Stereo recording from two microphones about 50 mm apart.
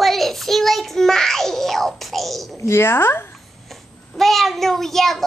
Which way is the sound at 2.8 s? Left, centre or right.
Left.